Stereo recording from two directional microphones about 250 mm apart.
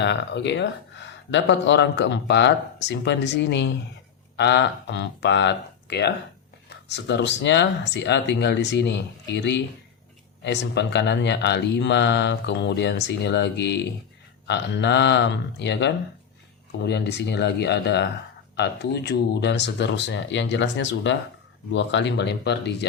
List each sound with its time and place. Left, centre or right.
0.0 s speech: left